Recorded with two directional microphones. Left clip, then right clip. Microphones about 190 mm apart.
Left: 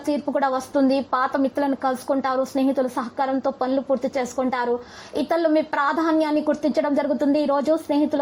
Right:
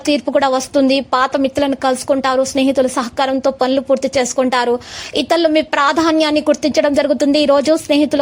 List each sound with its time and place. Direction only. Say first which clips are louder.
0.0 s a woman's voice: right 8 dB; 25° right (ahead or behind)